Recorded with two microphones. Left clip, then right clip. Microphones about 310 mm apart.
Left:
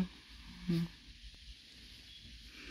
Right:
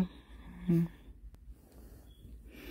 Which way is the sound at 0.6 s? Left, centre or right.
Centre.